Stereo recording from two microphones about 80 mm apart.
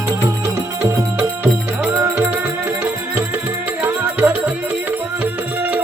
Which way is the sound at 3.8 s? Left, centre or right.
Right.